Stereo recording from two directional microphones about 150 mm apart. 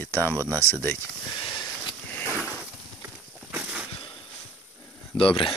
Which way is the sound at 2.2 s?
15° right (ahead or behind).